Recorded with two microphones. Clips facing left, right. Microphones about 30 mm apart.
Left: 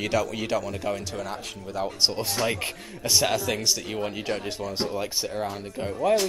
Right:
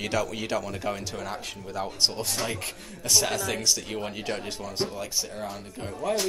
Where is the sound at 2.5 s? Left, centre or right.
Left.